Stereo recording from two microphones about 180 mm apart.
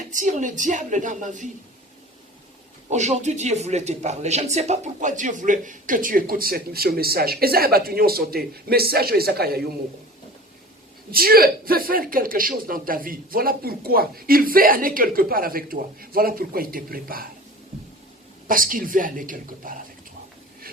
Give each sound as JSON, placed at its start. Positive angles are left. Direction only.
{"t": 0.1, "sound": "speech", "side_deg": -45}
{"t": 2.9, "sound": "speech", "side_deg": -40}
{"t": 11.1, "sound": "speech", "side_deg": -55}
{"t": 18.4, "sound": "speech", "side_deg": -50}